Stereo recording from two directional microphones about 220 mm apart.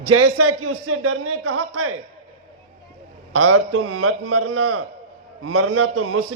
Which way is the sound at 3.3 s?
80° right.